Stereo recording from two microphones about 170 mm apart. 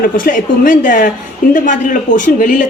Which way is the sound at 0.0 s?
55° left (ahead or behind).